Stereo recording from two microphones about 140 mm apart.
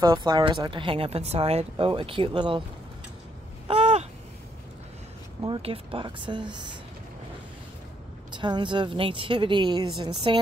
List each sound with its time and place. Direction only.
0.0 s speech: 25° right (ahead or behind)
3.6 s a sound: 50° right (ahead or behind)
5.4 s speech: 40° right (ahead or behind)
8.4 s speech: 35° right (ahead or behind)